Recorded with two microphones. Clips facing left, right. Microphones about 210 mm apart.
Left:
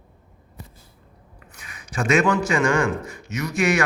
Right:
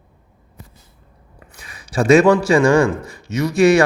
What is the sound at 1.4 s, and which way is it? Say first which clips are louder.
A man's voice: right 3 dB; 35° right (ahead or behind).